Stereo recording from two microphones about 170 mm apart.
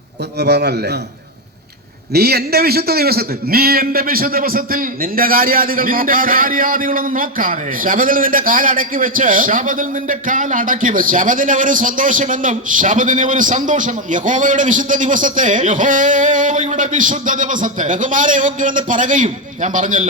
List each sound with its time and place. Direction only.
0.3 s a man's voice: 80° right
2.1 s a man's voice: 70° right (ahead or behind); by 20.1 s 50° right (ahead or behind)